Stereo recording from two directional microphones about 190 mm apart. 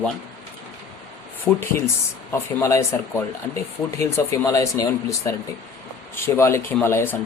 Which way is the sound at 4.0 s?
15° left (ahead or behind).